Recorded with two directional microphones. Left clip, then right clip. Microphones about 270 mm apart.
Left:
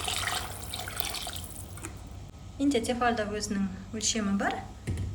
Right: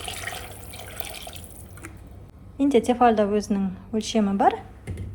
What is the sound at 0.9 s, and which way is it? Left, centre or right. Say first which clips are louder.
Water: left 1 dB; centre.